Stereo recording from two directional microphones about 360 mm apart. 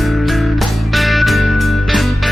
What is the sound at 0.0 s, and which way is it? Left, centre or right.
Music, centre.